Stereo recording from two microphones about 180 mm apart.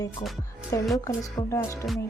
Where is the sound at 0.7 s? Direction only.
15° left (ahead or behind).